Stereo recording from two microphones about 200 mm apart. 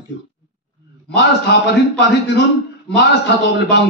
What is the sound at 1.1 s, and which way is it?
A man's voice, 60° left (ahead or behind).